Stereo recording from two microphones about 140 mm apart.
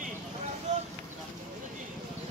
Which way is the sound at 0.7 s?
55° right (ahead or behind).